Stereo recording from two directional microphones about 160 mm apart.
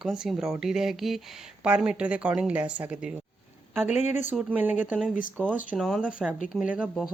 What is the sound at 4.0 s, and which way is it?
Speech, 45° left (ahead or behind).